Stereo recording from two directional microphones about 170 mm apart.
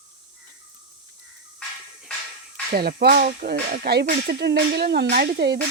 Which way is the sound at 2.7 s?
60° right (ahead or behind).